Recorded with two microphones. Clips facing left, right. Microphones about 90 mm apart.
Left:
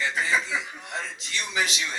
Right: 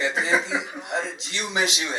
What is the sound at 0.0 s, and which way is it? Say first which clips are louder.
A man's voice: right 3 dB; 20° right (ahead or behind).